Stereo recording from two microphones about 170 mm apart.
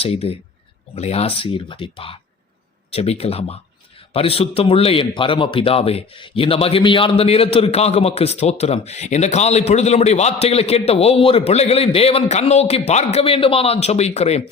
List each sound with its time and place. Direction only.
0.0 s a man's voice: 35° left (ahead or behind)